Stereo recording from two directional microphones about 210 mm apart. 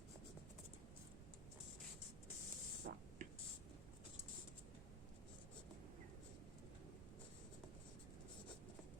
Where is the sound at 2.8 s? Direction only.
45° right (ahead or behind).